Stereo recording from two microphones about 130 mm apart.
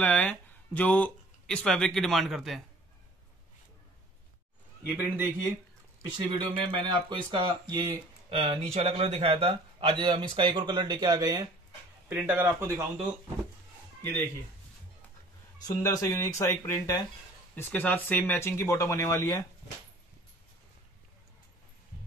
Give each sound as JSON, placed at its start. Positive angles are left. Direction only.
{"t": 0.0, "sound": "speech", "side_deg": 10}
{"t": 4.8, "sound": "a man's voice", "side_deg": -15}
{"t": 6.1, "sound": "a man's voice", "side_deg": -40}
{"t": 12.1, "sound": "a man's voice", "side_deg": -15}
{"t": 15.6, "sound": "speech", "side_deg": 25}